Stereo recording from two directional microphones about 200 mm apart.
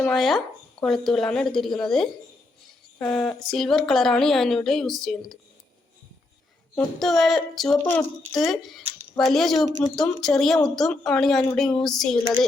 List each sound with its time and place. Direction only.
0.0 s a woman's voice: centre (ahead or behind)
6.7 s a woman's voice: centre (ahead or behind)